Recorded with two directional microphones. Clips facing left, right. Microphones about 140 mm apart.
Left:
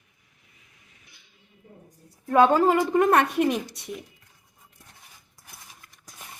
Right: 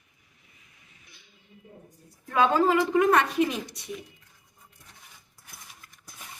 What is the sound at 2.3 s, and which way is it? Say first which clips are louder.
A woman's voice: left 4 dB; 45° left (ahead or behind).